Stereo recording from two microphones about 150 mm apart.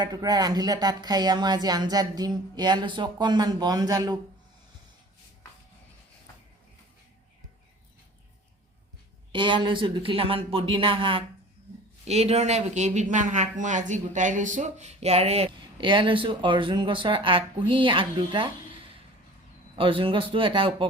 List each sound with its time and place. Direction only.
0.0 s speech: 25° right (ahead or behind)
9.3 s speech: 35° right (ahead or behind)
19.7 s speech: 35° right (ahead or behind)